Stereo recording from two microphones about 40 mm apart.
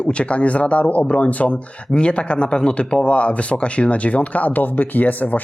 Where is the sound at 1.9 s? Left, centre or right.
Left.